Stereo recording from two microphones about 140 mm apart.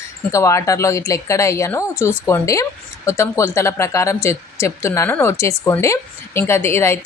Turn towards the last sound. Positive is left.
turn(degrees=20)  # may be behind; listen again after turning